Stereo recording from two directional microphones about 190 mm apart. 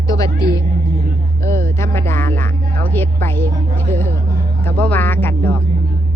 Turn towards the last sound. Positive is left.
turn(degrees=10)  # may be behind; listen again after turning